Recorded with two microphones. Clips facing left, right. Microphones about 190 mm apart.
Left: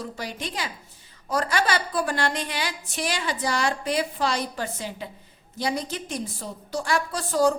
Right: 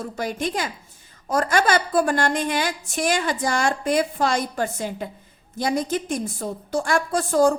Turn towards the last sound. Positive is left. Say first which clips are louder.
# right 4 dB
turn(degrees=-50)  # may be behind; listen again after turning